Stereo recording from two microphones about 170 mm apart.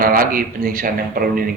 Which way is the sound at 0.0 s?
55° right (ahead or behind).